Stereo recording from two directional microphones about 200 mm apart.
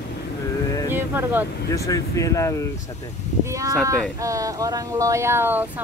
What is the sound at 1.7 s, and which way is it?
Speech, 15° left (ahead or behind).